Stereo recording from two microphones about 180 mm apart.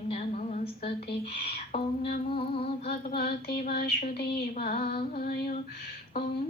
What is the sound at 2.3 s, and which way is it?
Music, 30° left (ahead or behind).